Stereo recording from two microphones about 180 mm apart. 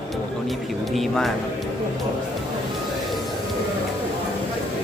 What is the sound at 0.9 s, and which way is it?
Speech, centre (ahead or behind).